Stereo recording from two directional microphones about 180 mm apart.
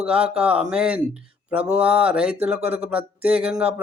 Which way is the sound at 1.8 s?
5° right (ahead or behind).